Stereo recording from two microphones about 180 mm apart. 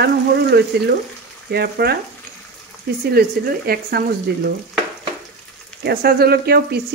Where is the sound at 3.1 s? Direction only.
60° right (ahead or behind).